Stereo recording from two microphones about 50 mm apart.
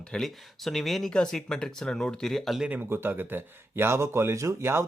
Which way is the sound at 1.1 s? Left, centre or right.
Centre.